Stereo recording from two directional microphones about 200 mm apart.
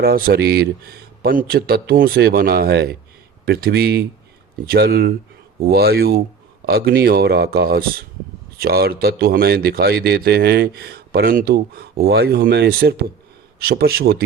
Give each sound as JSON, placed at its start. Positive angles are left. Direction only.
{"t": 0.0, "sound": "speech", "side_deg": -50}